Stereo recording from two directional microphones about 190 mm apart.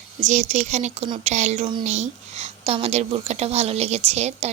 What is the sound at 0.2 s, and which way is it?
A woman's voice, 40° right (ahead or behind).